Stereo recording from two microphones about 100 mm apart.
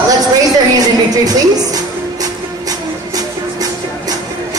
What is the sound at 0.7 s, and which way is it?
Music, 40° right (ahead or behind).